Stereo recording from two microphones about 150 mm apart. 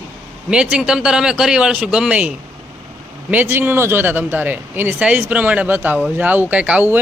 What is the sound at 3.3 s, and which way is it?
A man's voice, 15° right (ahead or behind).